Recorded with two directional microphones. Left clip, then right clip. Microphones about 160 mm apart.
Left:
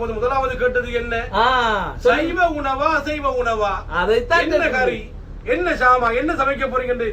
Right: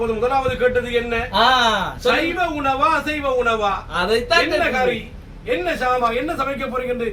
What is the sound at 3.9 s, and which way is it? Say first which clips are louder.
Speech: left 1 dB; centre (ahead or behind).